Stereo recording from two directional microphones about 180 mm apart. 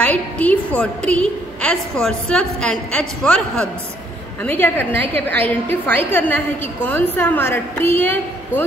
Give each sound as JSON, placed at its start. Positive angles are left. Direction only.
{"t": 0.0, "sound": "a woman's voice", "side_deg": 10}